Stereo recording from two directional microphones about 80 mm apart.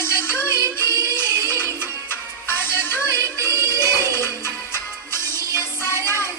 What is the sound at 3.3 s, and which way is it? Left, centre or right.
Music, right.